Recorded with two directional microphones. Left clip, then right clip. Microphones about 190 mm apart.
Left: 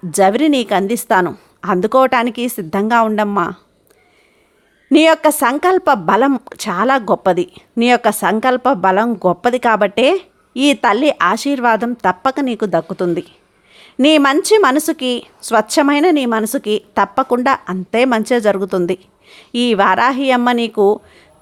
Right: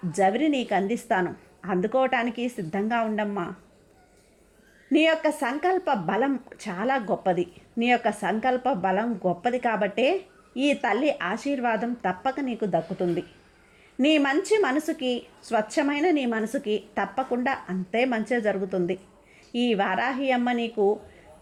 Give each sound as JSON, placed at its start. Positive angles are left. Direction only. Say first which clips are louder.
{"t": 0.1, "sound": "a woman's voice", "louder": "left 11 dB", "side_deg": 30}
{"t": 4.9, "sound": "a woman's voice", "louder": "left 11 dB", "side_deg": 25}